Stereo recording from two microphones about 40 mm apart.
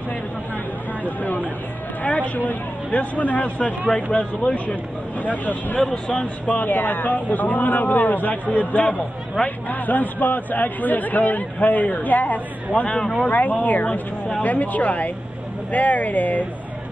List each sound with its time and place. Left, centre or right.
1.0 s a man's voice: left